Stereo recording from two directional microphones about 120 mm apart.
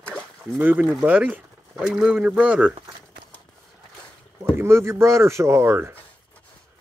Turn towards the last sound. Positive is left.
turn(degrees=-20)  # may be behind; listen again after turning